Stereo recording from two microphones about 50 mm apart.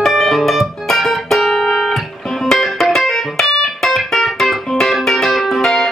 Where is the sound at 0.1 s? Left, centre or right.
Centre.